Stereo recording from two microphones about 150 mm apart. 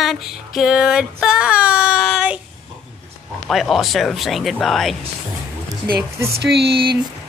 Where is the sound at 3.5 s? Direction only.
Centre (ahead or behind).